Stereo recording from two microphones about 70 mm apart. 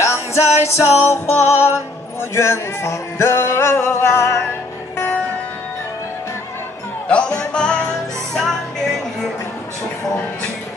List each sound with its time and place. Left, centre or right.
0.0 s music: left
7.1 s music: centre